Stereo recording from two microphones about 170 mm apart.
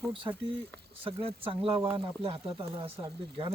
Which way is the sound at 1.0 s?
35° right (ahead or behind).